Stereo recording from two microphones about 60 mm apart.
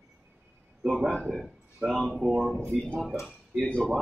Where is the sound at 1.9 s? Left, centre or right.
Centre.